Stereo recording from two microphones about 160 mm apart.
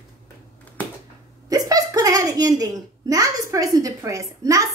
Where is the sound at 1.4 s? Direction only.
20° right (ahead or behind).